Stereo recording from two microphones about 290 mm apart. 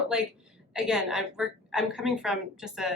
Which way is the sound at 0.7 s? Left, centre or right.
Centre.